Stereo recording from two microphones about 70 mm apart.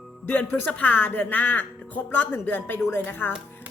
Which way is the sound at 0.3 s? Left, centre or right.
Left.